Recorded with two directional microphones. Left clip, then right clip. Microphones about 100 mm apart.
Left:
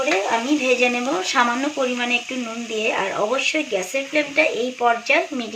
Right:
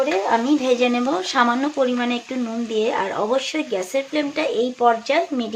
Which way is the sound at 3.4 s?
85° right.